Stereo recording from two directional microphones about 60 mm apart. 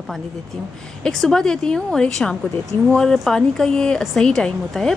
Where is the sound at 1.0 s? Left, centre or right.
Centre.